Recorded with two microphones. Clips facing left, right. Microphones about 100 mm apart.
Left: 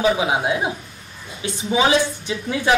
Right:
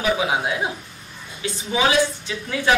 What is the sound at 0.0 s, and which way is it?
Speech, 25° left (ahead or behind).